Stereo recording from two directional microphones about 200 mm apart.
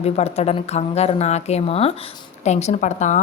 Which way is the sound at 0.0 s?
30° left (ahead or behind).